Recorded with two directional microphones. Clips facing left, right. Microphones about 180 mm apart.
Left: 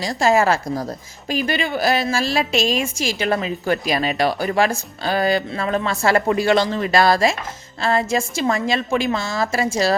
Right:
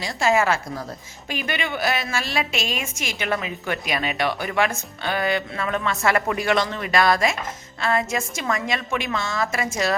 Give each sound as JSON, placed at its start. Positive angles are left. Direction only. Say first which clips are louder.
{"t": 0.0, "sound": "a woman's voice", "louder": "left 4 dB", "side_deg": 35}